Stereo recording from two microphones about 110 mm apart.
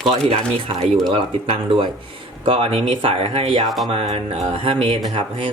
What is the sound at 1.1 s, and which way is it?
Speech, 55° right (ahead or behind).